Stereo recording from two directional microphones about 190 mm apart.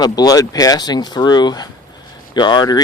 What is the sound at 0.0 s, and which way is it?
Speech, 20° left (ahead or behind).